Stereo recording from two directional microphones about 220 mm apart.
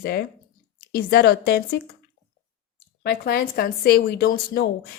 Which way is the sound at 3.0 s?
45° left (ahead or behind).